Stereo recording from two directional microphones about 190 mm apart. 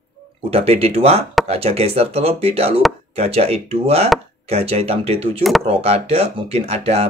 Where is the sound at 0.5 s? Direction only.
30° right (ahead or behind).